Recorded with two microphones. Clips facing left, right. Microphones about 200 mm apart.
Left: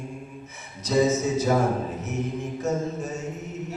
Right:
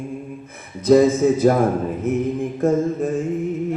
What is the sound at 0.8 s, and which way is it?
A man's voice, 55° right (ahead or behind).